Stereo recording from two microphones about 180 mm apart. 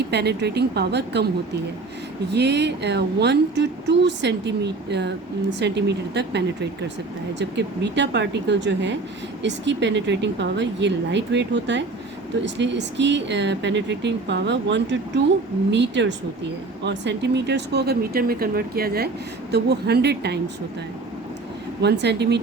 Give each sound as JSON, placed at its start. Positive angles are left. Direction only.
{"t": 0.1, "sound": "speech", "side_deg": -65}
{"t": 2.3, "sound": "speech", "side_deg": -70}
{"t": 21.8, "sound": "speech", "side_deg": -70}